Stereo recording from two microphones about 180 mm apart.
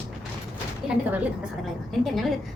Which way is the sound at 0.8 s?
5° right (ahead or behind).